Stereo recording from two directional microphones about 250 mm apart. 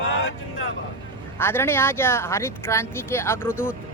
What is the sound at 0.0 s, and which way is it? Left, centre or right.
Vehicle, left.